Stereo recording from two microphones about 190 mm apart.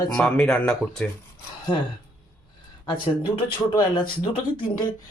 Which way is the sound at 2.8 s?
25° left (ahead or behind).